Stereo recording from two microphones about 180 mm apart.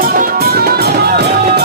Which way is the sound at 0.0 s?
55° right (ahead or behind).